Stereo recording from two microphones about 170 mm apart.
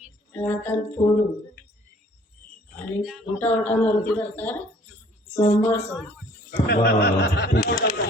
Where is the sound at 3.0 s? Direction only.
Centre (ahead or behind).